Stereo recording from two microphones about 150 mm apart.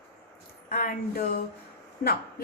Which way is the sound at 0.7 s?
90° left.